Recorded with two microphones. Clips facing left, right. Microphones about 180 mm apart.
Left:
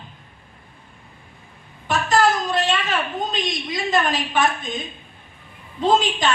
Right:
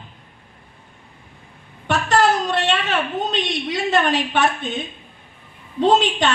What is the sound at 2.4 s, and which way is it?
A woman's voice, 70° right (ahead or behind).